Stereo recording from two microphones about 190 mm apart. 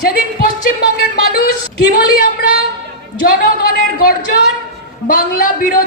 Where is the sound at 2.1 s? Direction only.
55° left (ahead or behind).